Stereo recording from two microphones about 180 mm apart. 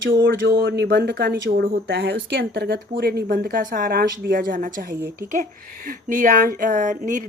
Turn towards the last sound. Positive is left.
turn(degrees=-45)  # may be behind; listen again after turning